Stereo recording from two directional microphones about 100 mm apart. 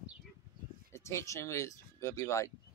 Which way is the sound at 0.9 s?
30° left (ahead or behind).